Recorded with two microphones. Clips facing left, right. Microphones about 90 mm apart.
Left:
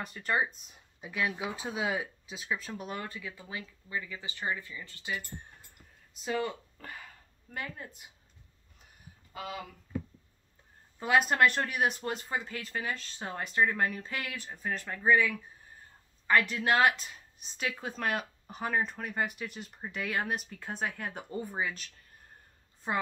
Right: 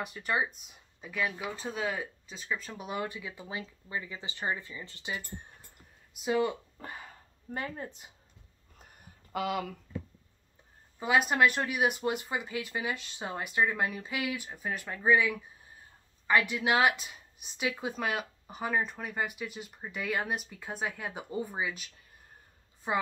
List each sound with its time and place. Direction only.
0.0 s a woman's voice: 5° right (ahead or behind)
1.3 s speech: 20° left (ahead or behind)
1.6 s a woman's voice: 10° left (ahead or behind)
3.0 s speech: 15° right (ahead or behind)
9.3 s speech: 80° right
11.0 s a woman's voice: 5° right (ahead or behind)